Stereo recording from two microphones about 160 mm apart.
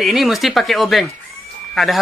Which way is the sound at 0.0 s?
Centre (ahead or behind).